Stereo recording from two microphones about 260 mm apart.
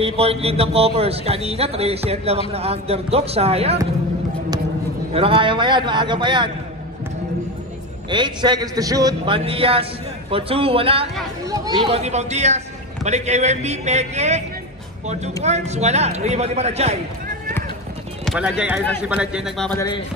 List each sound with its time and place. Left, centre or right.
0.0 s a man's voice: right
5.1 s a man's voice: right
8.1 s a man's voice: centre
15.4 s a man's voice: right
18.2 s a man's voice: centre